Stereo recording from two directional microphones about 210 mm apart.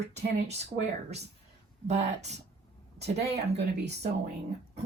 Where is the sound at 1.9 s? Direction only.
30° right (ahead or behind).